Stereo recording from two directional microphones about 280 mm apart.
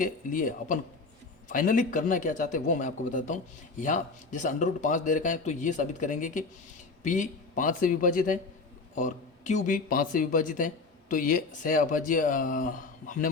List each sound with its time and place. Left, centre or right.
0.0 s speech: left